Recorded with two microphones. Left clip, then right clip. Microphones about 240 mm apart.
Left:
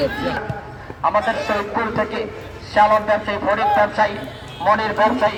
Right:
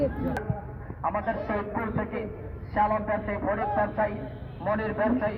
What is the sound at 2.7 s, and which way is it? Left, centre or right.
A man's voice, left.